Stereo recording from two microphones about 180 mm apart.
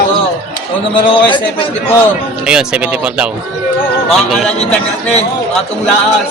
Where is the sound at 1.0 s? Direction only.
30° left (ahead or behind).